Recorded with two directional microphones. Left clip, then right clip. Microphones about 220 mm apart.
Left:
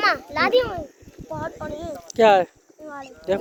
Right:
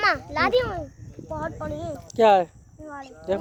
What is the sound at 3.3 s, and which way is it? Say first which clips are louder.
Speech: left 2 dB; centre (ahead or behind).